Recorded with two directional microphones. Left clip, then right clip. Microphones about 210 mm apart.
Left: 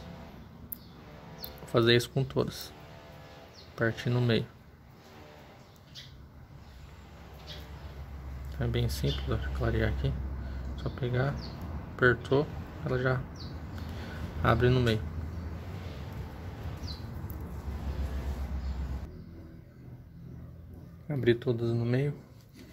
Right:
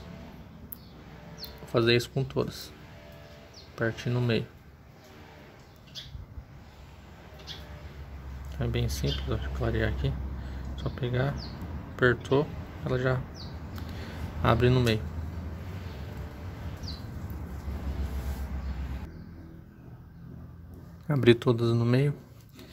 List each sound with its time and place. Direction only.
1.7 s speech: 5° left (ahead or behind)
3.7 s speech: 5° left (ahead or behind)
8.5 s speech: centre (ahead or behind)
14.4 s speech: 5° right (ahead or behind)
21.1 s speech: 20° right (ahead or behind)